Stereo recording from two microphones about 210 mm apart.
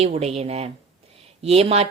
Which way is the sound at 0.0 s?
30° right (ahead or behind).